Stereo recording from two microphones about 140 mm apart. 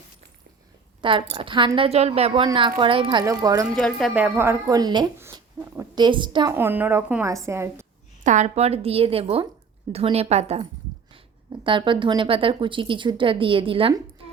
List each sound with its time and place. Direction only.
1.0 s a woman's voice: 40° right (ahead or behind)
3.2 s a woman's voice: 25° right (ahead or behind)
3.8 s speech: 5° left (ahead or behind)
4.1 s a woman's voice: 15° right (ahead or behind); by 6.5 s 35° right (ahead or behind)
6.5 s a woman's voice: 15° right (ahead or behind)
8.2 s a woman's voice: 60° right (ahead or behind)
11.6 s a woman's voice: 35° right (ahead or behind)